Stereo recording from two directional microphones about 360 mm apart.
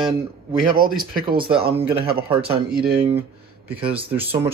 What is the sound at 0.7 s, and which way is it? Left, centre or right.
Speech, centre.